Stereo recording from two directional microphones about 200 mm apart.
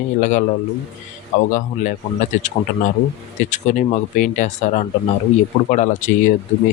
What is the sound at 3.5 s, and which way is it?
Speech, 40° left (ahead or behind).